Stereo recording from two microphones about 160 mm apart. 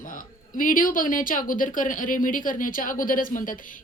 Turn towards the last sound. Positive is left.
turn(degrees=55)  # may be behind; listen again after turning